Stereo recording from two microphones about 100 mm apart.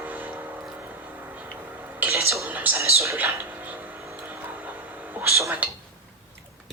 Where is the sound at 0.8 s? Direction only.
20° right (ahead or behind).